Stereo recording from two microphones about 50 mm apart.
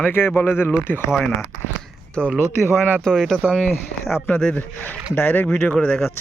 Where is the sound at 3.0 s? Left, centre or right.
Centre.